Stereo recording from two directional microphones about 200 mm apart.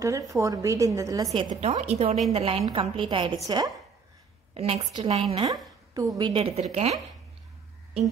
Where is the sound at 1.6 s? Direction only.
35° right (ahead or behind).